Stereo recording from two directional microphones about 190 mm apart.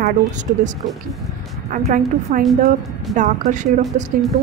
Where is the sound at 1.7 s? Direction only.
45° right (ahead or behind).